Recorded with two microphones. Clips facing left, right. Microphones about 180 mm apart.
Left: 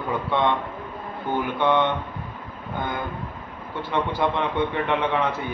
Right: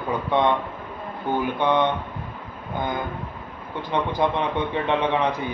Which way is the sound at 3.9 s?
15° right (ahead or behind).